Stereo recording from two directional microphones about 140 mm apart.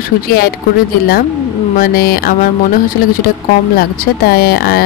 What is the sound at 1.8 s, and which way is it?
Speech, 90° left.